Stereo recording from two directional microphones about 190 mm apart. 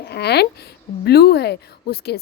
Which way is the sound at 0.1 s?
60° left (ahead or behind).